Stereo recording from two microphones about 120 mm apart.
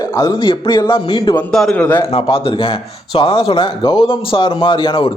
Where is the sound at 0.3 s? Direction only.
40° left (ahead or behind).